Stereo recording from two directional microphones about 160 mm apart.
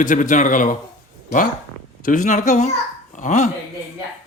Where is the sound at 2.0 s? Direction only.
55° left (ahead or behind).